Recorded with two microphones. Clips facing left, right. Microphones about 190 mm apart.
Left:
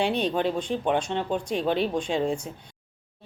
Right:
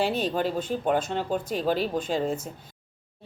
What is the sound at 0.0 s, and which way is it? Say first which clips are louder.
A woman's voice: left 1 dB; centre (ahead or behind).